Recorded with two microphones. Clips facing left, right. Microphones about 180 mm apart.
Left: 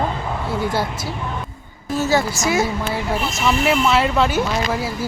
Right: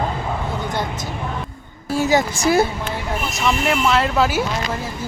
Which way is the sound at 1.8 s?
10° right (ahead or behind).